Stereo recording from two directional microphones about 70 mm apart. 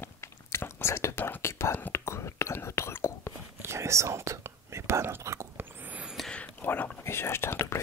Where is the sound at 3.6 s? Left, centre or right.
Right.